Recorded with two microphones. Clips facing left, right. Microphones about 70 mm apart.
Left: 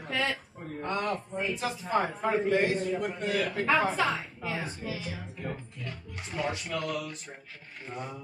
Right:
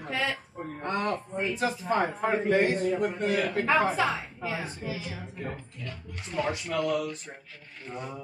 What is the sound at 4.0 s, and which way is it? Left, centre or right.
Speech, centre.